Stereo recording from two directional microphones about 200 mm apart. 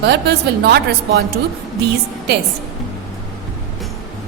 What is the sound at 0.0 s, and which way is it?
Speech, 55° right (ahead or behind).